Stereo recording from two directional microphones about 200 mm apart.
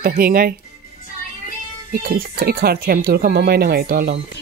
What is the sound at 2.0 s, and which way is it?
A woman's voice, 45° right (ahead or behind).